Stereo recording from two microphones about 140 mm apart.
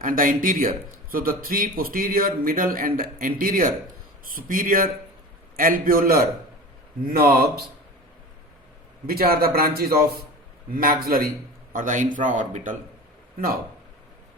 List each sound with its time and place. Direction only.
0.0 s speech: 80° right
9.0 s speech: 90° right
11.7 s a man's voice: 70° right (ahead or behind)